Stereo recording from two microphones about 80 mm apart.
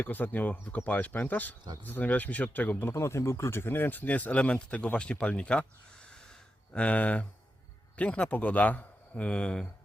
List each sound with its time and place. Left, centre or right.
0.0 s speech: left
2.9 s speech: left; by 5.6 s centre
6.7 s speech: centre